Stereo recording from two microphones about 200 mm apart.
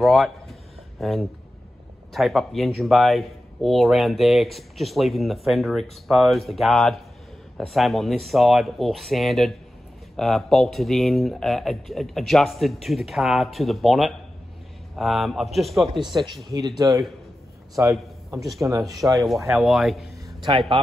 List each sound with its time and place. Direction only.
0.0 s a sound: centre (ahead or behind)
2.1 s speech: centre (ahead or behind)
16.0 s speech: 20° right (ahead or behind)
19.1 s speech: centre (ahead or behind)
20.4 s speech: 30° right (ahead or behind)